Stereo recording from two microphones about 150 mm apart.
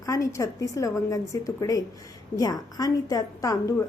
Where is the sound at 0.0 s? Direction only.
20° left (ahead or behind).